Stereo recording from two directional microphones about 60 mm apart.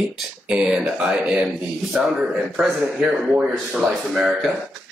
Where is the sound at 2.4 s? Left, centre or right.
Centre.